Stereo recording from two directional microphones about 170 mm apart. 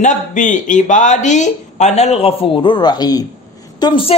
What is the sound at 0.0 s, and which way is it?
A woman's voice, 45° left (ahead or behind).